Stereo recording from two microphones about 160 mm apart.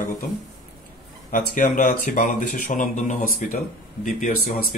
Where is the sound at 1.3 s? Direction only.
55° left (ahead or behind).